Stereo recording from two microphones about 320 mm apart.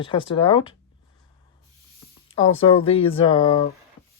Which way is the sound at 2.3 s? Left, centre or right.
Left.